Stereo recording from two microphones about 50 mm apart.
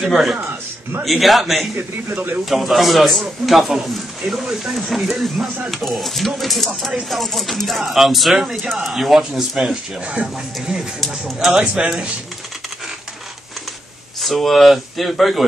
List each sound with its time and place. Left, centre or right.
0.0 s speech: centre
0.4 s speech: right
1.0 s speech: centre
2.1 s speech: right
2.5 s speech: centre
11.0 s speech: centre
11.5 s speech: centre
14.2 s speech: centre